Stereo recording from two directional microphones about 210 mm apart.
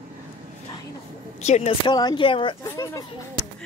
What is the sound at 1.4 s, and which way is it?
Speech, 30° left (ahead or behind).